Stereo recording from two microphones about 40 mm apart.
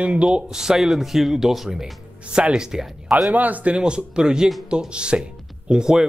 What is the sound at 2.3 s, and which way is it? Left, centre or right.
Speech, right.